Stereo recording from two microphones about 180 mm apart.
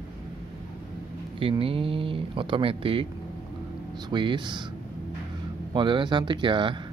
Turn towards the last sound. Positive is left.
turn(degrees=-25)  # may be behind; listen again after turning